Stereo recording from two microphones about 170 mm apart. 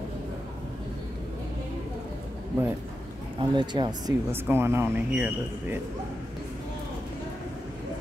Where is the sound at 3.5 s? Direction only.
25° right (ahead or behind).